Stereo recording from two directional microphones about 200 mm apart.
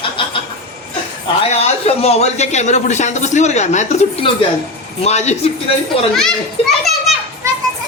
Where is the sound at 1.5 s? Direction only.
30° left (ahead or behind).